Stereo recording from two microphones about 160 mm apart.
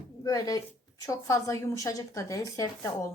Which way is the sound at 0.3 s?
25° left (ahead or behind).